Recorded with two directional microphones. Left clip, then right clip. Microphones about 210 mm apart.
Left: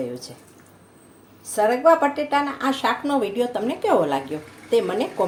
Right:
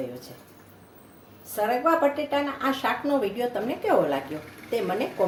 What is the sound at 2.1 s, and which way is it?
Speech, 40° left (ahead or behind).